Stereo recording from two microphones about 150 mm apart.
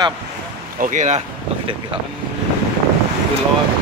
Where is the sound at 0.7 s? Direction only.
55° right (ahead or behind).